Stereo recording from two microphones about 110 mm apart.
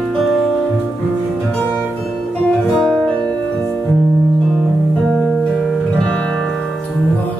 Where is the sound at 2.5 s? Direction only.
5° left (ahead or behind).